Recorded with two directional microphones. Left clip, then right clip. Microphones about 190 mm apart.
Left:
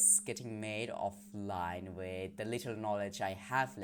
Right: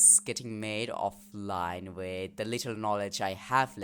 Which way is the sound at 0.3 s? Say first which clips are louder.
Right 5 dB; 30° right (ahead or behind).